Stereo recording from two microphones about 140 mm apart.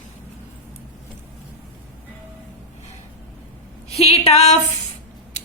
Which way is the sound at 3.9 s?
45° left (ahead or behind).